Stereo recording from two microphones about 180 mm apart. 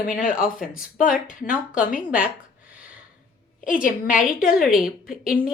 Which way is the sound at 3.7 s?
50° left (ahead or behind).